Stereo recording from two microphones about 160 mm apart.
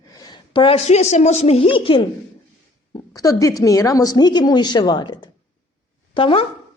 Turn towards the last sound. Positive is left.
turn(degrees=35)  # may be behind; listen again after turning